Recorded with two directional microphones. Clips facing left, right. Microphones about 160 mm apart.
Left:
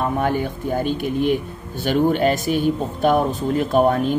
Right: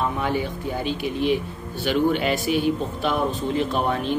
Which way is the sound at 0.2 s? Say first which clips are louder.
Left 3 dB; 50° left (ahead or behind).